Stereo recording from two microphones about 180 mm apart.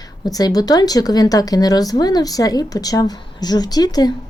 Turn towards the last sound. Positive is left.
turn(degrees=20)  # may be behind; listen again after turning